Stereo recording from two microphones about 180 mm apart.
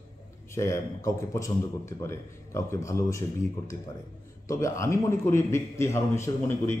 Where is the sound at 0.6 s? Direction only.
15° left (ahead or behind).